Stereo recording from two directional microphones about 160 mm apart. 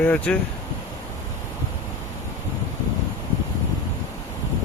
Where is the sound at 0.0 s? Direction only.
10° left (ahead or behind).